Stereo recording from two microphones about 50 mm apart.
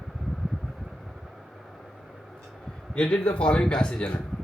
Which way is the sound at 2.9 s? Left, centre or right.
Left.